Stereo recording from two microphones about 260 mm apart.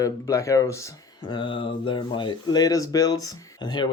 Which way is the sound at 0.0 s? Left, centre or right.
Centre.